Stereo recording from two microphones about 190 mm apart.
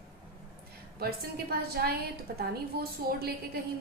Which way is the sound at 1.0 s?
55° right (ahead or behind).